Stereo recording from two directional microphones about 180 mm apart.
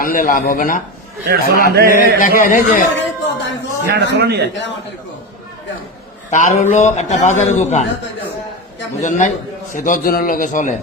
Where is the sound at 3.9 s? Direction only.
65° right (ahead or behind).